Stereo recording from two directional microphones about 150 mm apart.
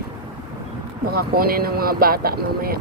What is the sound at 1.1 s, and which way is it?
Speech, 85° right.